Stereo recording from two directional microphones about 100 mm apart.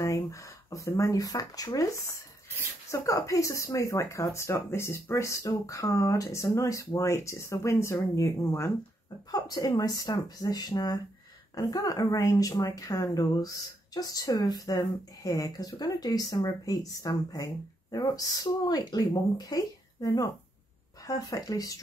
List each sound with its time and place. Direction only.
0.0 s a woman's voice: 30° left (ahead or behind)